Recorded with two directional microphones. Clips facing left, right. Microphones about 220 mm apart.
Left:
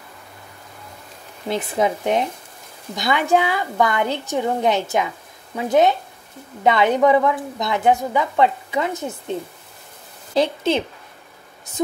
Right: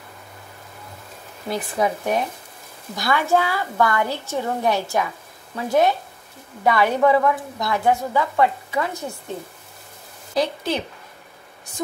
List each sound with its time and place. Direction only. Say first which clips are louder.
1.5 s a woman's voice: left 2 dB; 20° left (ahead or behind)
10.3 s a woman's voice: left 4 dB; 25° left (ahead or behind)